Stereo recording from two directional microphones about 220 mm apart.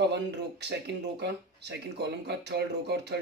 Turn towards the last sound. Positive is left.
turn(degrees=-50)  # may be behind; listen again after turning